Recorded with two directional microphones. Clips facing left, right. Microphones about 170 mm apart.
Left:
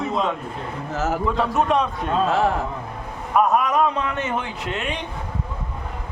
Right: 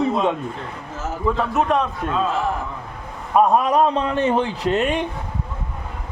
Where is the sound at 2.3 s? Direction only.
75° left (ahead or behind).